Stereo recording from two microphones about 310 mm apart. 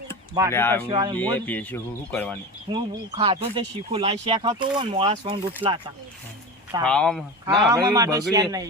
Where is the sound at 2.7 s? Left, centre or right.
Centre.